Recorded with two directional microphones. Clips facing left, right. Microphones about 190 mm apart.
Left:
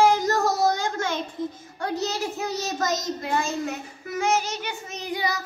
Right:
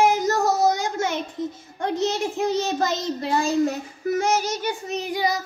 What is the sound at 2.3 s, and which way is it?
Child singing, 30° right (ahead or behind).